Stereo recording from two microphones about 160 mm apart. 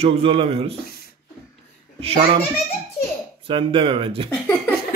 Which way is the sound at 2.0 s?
40° right (ahead or behind).